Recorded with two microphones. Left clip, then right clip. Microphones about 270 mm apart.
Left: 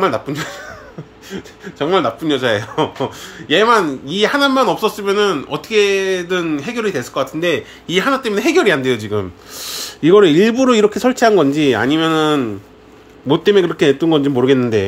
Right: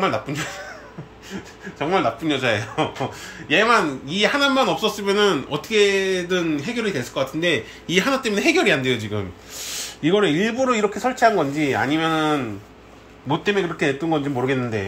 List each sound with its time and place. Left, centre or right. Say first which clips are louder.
0.0 s speech: left 5 dB; left
1.8 s speech: left 5 dB; left